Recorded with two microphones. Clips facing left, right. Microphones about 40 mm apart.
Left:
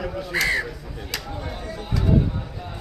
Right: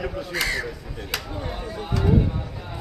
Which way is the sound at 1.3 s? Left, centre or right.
Centre.